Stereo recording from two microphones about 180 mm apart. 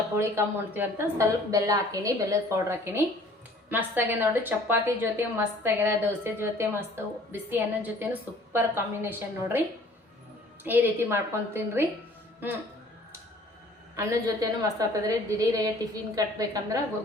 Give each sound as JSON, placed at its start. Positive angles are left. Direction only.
{"t": 0.2, "sound": "a woman's voice", "side_deg": -15}
{"t": 13.9, "sound": "a woman's voice", "side_deg": -15}